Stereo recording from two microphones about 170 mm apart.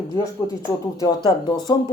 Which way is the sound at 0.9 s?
25° left (ahead or behind).